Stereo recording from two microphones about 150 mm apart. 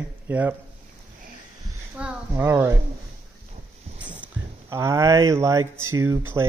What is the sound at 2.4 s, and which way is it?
Speech, 15° right (ahead or behind).